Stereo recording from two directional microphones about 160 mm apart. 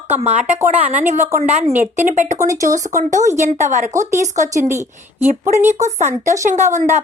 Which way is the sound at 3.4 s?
50° right (ahead or behind).